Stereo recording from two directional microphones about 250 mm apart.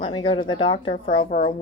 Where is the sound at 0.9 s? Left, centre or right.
Left.